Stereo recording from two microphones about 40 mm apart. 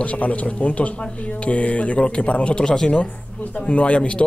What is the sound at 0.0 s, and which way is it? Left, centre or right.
A man's voice, left.